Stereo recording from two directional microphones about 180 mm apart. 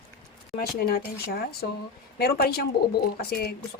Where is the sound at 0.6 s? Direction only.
55° left (ahead or behind).